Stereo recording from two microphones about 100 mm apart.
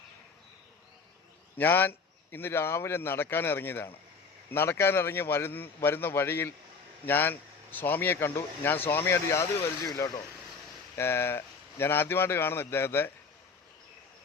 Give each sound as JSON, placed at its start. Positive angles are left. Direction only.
{"t": 1.5, "sound": "speech", "side_deg": 20}
{"t": 10.9, "sound": "speech", "side_deg": 25}